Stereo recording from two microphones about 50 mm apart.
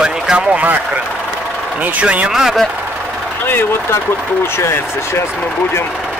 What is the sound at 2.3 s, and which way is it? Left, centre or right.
Speech, centre.